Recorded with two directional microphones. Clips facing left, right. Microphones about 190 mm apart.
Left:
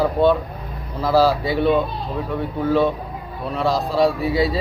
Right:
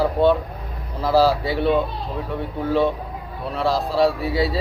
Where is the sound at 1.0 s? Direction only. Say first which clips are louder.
Left 1 dB; 15° right (ahead or behind).